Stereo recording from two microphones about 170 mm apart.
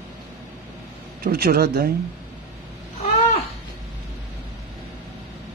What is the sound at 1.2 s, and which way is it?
Speech, 65° right (ahead or behind).